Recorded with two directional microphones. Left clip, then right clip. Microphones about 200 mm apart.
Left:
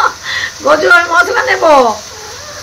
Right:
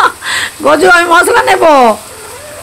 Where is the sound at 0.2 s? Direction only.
65° right (ahead or behind).